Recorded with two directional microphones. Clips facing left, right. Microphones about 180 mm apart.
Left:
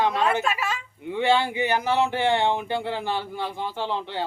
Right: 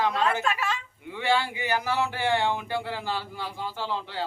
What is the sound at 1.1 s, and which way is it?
Speech, 20° left (ahead or behind).